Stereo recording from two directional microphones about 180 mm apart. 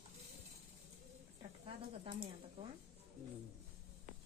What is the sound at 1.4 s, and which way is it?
Speech, 30° right (ahead or behind).